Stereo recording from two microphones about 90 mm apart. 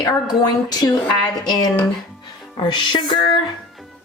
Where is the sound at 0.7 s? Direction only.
50° left (ahead or behind).